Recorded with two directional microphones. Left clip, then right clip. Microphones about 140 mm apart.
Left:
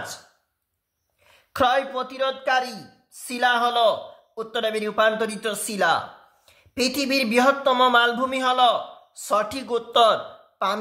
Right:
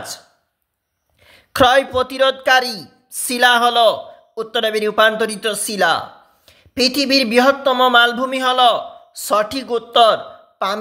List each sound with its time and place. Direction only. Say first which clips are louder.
1.2 s speech: right 8 dB; 35° right (ahead or behind)